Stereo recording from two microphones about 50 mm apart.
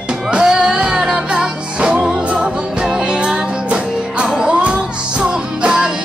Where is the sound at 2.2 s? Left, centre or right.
Right.